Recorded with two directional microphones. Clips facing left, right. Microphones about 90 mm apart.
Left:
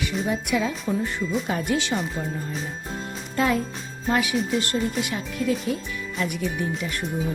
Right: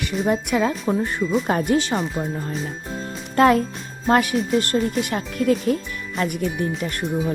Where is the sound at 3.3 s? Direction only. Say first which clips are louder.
Right 7 dB; 60° right (ahead or behind).